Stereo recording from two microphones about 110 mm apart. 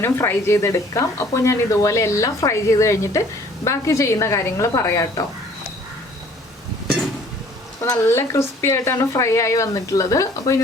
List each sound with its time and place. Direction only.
0.0 s speech: 20° left (ahead or behind)
7.8 s speech: 25° left (ahead or behind)